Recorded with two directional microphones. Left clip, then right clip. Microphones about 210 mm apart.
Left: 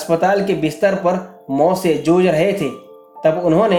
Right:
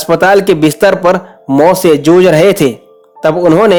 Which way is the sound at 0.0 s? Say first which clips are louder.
Right 8 dB; 50° right (ahead or behind).